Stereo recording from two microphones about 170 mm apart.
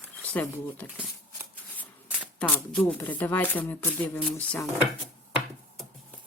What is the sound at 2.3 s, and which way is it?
Speech, 10° left (ahead or behind).